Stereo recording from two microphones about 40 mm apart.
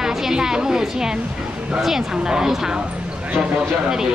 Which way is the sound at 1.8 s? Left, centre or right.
Centre.